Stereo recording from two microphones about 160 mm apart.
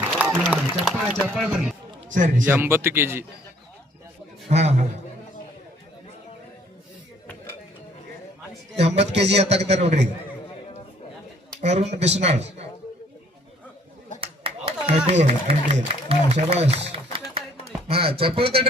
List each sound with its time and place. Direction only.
0.0 s a sound: 10° right (ahead or behind)
0.5 s speech: 5° right (ahead or behind)
2.0 s a man's voice: 55° right (ahead or behind)
2.5 s a man's voice: 15° right (ahead or behind)
4.4 s a man's voice: 45° right (ahead or behind)
8.8 s a man's voice: 40° right (ahead or behind)
11.6 s a man's voice: 45° right (ahead or behind)
14.2 s a sound: 35° right (ahead or behind)
16.0 s speech: 40° right (ahead or behind)
17.3 s a sound: 35° right (ahead or behind)